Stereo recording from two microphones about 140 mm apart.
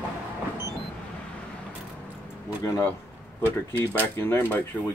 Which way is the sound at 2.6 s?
20° left (ahead or behind).